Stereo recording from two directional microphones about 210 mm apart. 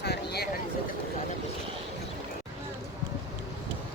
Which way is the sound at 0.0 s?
50° left (ahead or behind).